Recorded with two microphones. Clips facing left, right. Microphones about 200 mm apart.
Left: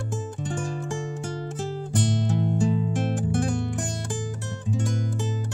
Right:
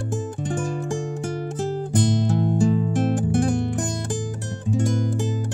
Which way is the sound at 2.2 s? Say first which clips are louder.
Right 4 dB; 45° right (ahead or behind).